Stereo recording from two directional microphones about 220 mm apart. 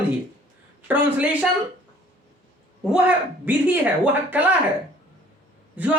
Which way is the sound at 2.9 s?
5° right (ahead or behind).